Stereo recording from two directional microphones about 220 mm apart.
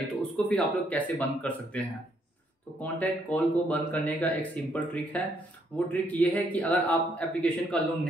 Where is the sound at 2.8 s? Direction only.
5° left (ahead or behind).